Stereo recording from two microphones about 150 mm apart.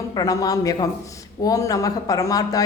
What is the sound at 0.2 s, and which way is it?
A man's voice, 25° left (ahead or behind).